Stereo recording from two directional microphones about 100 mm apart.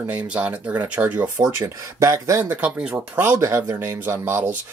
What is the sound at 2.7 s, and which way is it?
Speech, 10° right (ahead or behind).